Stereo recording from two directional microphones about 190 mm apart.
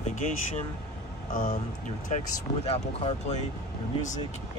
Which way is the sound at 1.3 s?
45° left (ahead or behind).